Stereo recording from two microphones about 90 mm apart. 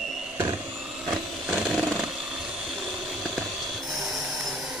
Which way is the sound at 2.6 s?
5° right (ahead or behind).